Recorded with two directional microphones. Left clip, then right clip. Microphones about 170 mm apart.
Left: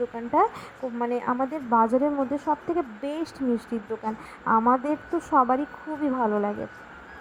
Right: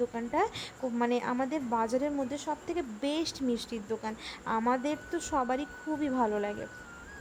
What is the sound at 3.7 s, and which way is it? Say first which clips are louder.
Speech: left 5 dB; 5° right (ahead or behind).